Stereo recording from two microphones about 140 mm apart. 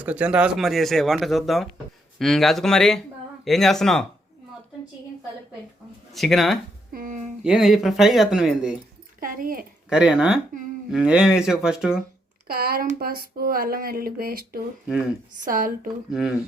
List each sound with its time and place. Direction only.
0.0 s speech: 10° right (ahead or behind)
6.1 s speech: centre (ahead or behind)
6.9 s a sound: 70° right (ahead or behind)
7.4 s speech: 5° right (ahead or behind)
9.2 s speech: 80° right
9.9 s speech: 5° right (ahead or behind)
12.5 s speech: 90° right
15.4 s a woman's voice: 75° right (ahead or behind)